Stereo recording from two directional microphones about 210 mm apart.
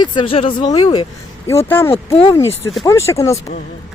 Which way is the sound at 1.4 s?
10° left (ahead or behind).